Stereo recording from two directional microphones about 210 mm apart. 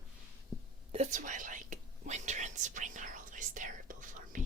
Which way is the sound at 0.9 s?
35° right (ahead or behind).